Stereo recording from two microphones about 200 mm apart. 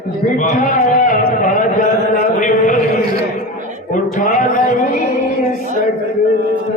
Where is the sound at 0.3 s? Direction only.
40° left (ahead or behind).